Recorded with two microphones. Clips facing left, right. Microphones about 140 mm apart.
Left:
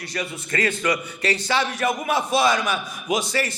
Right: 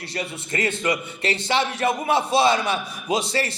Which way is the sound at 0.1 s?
25° right (ahead or behind).